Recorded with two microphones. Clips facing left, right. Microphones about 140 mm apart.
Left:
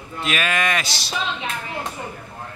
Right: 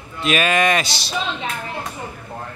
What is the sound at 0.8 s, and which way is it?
Speech, 70° right (ahead or behind).